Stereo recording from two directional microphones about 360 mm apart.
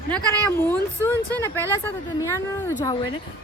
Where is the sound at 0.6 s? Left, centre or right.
Centre.